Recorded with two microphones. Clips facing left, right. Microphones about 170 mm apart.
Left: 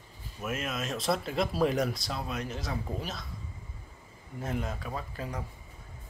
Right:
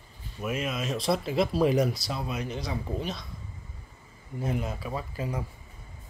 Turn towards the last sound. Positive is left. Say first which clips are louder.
# right 4 dB
turn(degrees=-5)  # may be behind; listen again after turning